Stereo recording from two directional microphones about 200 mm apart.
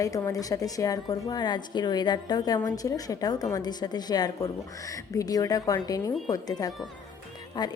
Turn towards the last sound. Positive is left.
turn(degrees=20)  # may be behind; listen again after turning